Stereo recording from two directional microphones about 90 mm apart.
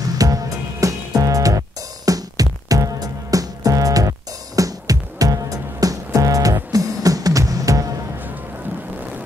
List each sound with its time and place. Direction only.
0.2 s music: 40° right (ahead or behind)